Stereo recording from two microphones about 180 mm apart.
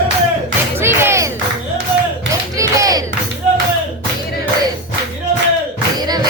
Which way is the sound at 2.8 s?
20° right (ahead or behind).